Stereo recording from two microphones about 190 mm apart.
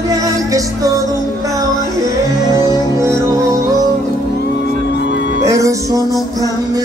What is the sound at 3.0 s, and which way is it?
Music, 15° right (ahead or behind).